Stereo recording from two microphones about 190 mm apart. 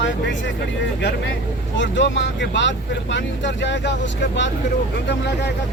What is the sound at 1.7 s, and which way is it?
Speech, 70° left (ahead or behind).